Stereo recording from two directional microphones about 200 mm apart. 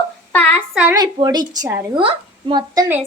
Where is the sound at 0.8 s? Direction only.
20° right (ahead or behind).